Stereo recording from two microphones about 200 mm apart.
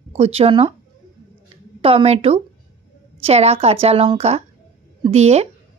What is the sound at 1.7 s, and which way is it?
A woman's voice, 25° right (ahead or behind).